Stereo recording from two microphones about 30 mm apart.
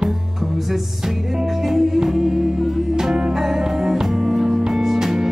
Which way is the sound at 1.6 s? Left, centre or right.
Centre.